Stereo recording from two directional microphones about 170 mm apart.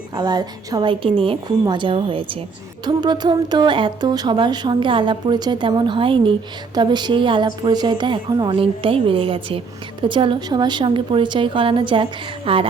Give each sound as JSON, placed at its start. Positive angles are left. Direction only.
{"t": 0.2, "sound": "speech", "side_deg": -25}